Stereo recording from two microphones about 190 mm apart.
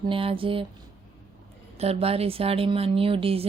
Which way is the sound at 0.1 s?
30° right (ahead or behind).